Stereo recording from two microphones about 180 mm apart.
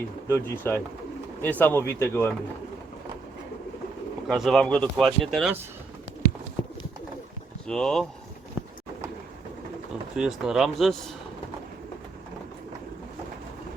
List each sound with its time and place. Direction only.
0.3 s speech: 10° left (ahead or behind)
4.3 s speech: centre (ahead or behind)
6.6 s bird: 25° left (ahead or behind)
7.7 s speech: 5° left (ahead or behind)
10.2 s speech: centre (ahead or behind)